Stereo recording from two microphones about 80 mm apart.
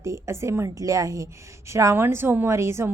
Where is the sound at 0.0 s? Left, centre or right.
Right.